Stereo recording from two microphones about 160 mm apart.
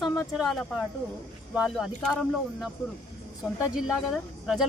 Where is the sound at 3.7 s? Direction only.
Centre (ahead or behind).